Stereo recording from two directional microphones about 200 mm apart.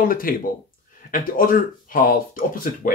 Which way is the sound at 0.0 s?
45° left (ahead or behind).